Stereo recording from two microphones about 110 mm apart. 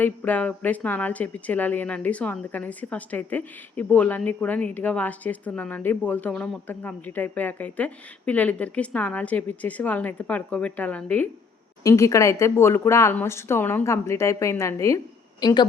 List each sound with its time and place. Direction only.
0.0 s a woman's voice: 15° left (ahead or behind)
11.8 s a woman's voice: 30° left (ahead or behind)
15.4 s speech: 40° left (ahead or behind)